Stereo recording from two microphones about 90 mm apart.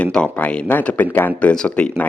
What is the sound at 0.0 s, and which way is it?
Speech, 15° left (ahead or behind).